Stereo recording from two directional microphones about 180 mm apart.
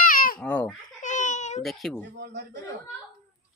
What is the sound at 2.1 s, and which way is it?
Speech, 70° right (ahead or behind).